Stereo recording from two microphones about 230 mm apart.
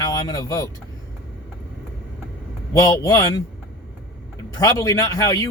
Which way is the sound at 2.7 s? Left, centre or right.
Centre.